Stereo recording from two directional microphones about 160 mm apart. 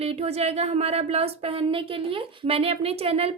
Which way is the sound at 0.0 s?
40° right (ahead or behind).